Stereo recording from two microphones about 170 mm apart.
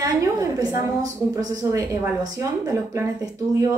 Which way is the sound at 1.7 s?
20° right (ahead or behind).